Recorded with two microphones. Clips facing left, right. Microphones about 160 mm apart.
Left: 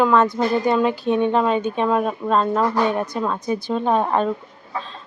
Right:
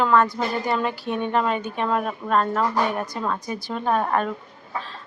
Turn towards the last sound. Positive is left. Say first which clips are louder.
# left 3 dB
turn(degrees=20)  # may be behind; listen again after turning